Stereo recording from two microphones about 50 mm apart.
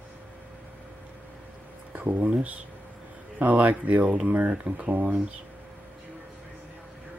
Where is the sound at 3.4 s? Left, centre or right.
Right.